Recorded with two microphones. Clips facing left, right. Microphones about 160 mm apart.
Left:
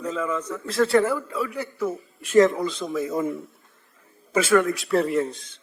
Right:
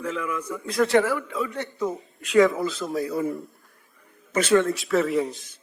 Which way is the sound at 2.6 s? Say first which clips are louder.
Even; 5° right (ahead or behind).